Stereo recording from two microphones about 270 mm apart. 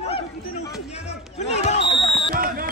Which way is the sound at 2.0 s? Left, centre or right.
Centre.